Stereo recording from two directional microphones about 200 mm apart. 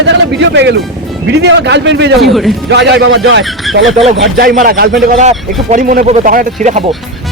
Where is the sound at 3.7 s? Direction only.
Centre (ahead or behind).